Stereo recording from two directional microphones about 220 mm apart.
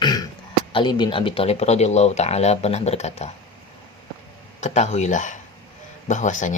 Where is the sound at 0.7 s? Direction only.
20° left (ahead or behind).